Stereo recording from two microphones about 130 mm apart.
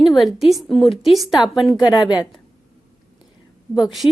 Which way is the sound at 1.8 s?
35° left (ahead or behind).